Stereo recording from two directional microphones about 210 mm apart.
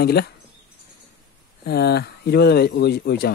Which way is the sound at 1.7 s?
50° left (ahead or behind).